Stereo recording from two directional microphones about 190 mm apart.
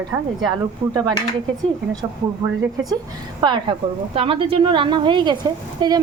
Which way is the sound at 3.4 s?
25° right (ahead or behind).